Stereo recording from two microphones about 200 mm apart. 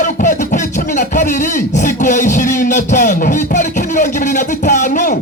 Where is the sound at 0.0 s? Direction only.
40° left (ahead or behind).